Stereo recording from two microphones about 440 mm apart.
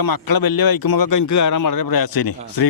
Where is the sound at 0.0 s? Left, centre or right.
Left.